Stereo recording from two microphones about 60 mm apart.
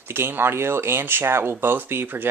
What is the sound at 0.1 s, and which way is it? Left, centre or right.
Speech, right.